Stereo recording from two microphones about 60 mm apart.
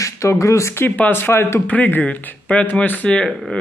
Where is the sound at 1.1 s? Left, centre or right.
Left.